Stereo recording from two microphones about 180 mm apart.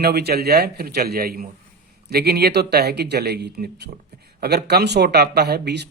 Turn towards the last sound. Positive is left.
turn(degrees=-65)  # may be behind; listen again after turning